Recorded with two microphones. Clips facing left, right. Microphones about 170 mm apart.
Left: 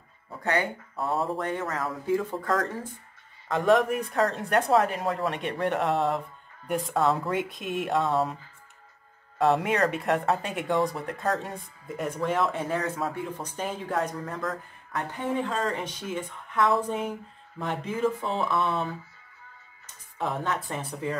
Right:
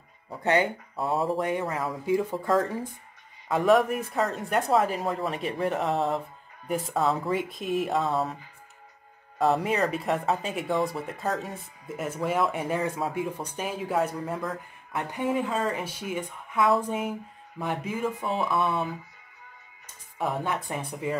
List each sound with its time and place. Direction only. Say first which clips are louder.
0.4 s speech: right 3 dB; 20° right (ahead or behind)
0.9 s speech: right 2 dB; centre (ahead or behind)
1.4 s a woman's voice: right 2 dB; 15° right (ahead or behind)
3.4 s speech: right 1 dB; 5° right (ahead or behind)
9.4 s a woman's voice: left 1 dB; centre (ahead or behind)
20.7 s a woman's voice: right 1 dB; 10° right (ahead or behind)